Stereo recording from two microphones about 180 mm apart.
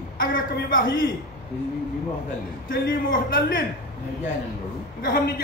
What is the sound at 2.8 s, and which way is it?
Speech, 55° left (ahead or behind).